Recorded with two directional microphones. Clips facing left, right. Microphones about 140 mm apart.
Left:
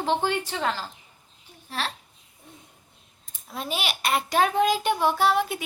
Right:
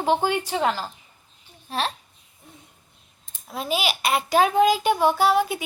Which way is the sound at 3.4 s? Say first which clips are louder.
Right 5 dB; 5° right (ahead or behind).